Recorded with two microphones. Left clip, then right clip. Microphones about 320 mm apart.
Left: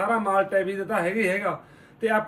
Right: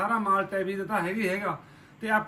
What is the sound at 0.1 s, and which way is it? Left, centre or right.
Speech, centre.